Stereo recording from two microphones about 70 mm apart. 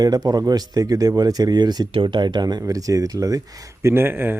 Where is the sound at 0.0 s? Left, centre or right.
Right.